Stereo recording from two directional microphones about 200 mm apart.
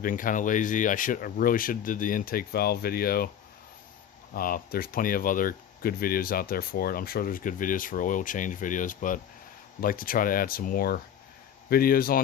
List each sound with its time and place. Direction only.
0.0 s speech: 45° left (ahead or behind)
4.4 s speech: 45° left (ahead or behind)